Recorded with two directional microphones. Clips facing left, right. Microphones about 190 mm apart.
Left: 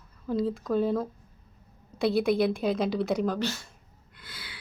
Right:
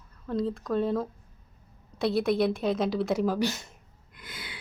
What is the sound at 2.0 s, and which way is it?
A woman's voice, centre (ahead or behind).